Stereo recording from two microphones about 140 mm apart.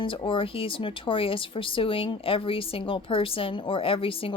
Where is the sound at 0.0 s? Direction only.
40° left (ahead or behind).